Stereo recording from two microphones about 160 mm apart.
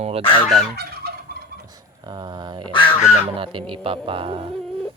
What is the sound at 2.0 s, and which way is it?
Speech, 30° right (ahead or behind).